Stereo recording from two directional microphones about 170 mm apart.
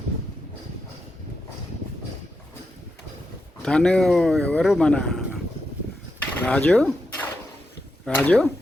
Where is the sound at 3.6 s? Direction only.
5° left (ahead or behind).